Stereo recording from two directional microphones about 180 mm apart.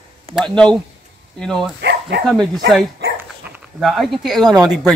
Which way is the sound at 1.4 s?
Centre (ahead or behind).